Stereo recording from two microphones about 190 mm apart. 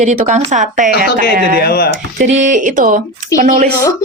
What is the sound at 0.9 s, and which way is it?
Speech, 55° left (ahead or behind).